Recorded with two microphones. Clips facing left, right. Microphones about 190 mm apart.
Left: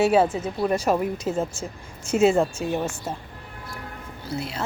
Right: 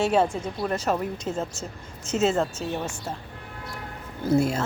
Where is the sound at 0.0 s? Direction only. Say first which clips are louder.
Left 3 dB; 5° left (ahead or behind).